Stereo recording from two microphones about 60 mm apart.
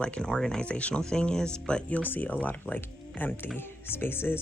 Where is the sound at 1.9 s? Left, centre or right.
Left.